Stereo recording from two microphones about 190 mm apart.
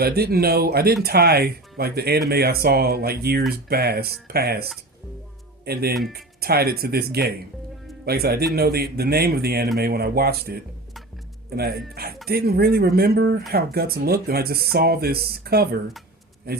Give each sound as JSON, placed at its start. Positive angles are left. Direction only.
{"t": 0.0, "sound": "speech", "side_deg": -55}